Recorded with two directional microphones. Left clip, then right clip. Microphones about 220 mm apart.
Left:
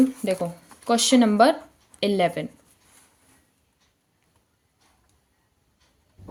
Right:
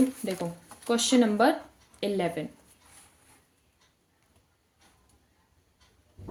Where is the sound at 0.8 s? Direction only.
50° left (ahead or behind).